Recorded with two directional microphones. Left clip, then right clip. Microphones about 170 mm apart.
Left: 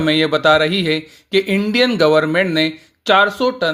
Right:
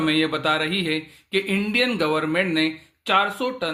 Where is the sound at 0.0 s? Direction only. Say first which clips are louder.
Left 7 dB; 40° left (ahead or behind).